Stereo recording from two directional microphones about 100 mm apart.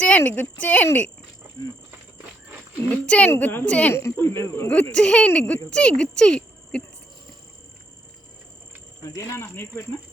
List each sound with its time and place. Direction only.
0.0 s speech: 15° left (ahead or behind)
2.9 s speech: 15° left (ahead or behind)
3.9 s speech: 25° left (ahead or behind)
4.7 s speech: 10° left (ahead or behind)
9.0 s speech: 30° left (ahead or behind)